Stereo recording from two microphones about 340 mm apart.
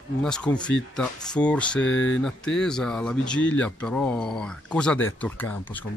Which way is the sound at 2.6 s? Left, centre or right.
Centre.